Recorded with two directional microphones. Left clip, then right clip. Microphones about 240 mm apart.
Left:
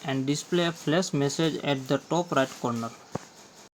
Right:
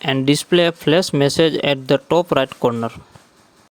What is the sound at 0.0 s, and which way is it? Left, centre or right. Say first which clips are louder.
Speech: right 12 dB; right.